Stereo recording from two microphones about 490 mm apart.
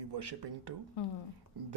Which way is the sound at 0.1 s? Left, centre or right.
Right.